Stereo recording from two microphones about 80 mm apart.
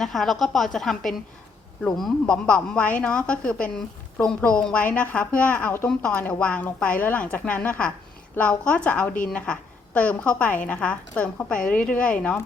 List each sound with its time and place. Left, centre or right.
0.0 s a woman's voice: centre